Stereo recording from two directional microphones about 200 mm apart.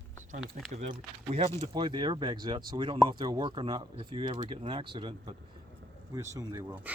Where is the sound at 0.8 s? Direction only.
35° right (ahead or behind).